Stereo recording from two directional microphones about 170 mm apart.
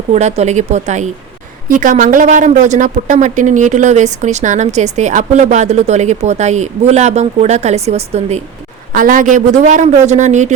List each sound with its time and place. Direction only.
0.1 s speech: 40° right (ahead or behind)
8.9 s speech: 55° right (ahead or behind)